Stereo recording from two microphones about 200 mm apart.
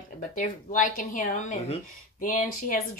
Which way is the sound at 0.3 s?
40° left (ahead or behind).